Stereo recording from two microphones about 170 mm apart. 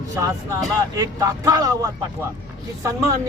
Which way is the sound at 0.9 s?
20° right (ahead or behind).